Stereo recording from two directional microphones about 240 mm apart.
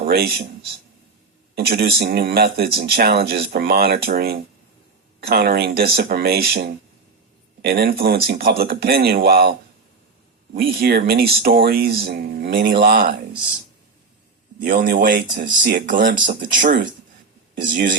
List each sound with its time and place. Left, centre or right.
0.0 s speech: right
1.5 s speech: right
7.6 s speech: right
14.6 s speech: right